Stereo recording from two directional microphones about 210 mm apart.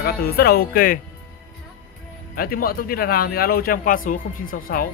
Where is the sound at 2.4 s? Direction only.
45° left (ahead or behind).